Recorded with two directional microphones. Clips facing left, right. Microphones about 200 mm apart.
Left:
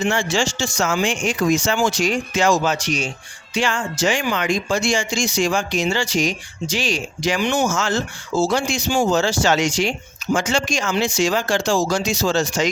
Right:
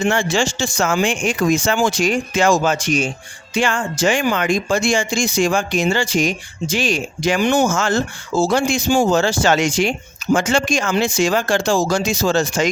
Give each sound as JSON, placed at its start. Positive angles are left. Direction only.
{"t": 0.0, "sound": "speech", "side_deg": -55}